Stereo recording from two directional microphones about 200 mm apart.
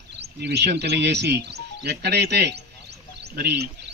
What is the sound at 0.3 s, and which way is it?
Speech, 55° right (ahead or behind).